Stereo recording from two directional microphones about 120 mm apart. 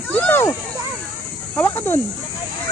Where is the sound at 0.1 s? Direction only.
15° left (ahead or behind).